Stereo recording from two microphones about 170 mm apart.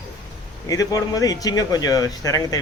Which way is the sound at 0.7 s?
20° left (ahead or behind).